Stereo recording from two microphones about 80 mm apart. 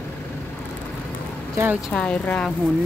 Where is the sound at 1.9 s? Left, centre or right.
Centre.